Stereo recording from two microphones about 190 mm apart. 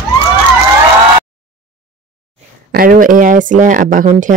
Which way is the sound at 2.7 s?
50° right (ahead or behind).